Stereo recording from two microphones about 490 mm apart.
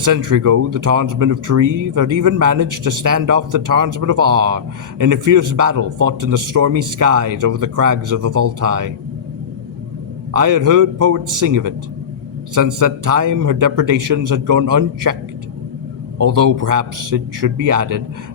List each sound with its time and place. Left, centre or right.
0.0 s speech: right
10.3 s speech: right
16.1 s speech: right